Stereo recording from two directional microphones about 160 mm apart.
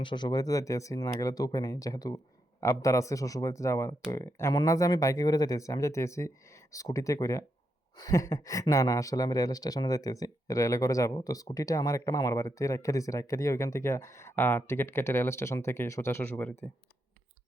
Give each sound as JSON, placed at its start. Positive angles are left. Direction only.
{"t": 0.0, "sound": "speech", "side_deg": 30}